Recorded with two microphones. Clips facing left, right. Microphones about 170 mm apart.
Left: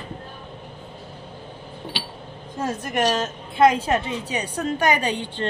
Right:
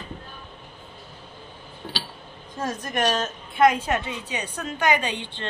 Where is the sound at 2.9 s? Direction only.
30° left (ahead or behind).